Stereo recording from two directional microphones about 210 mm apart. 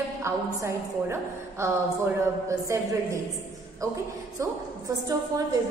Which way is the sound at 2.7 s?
15° right (ahead or behind).